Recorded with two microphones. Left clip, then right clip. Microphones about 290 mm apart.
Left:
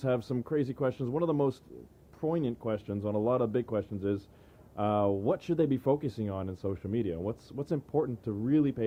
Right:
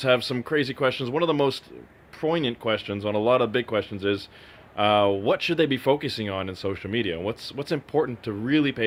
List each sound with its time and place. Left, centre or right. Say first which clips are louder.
0.0 s speech: right 9 dB; centre
8.0 s speech: right 7 dB; centre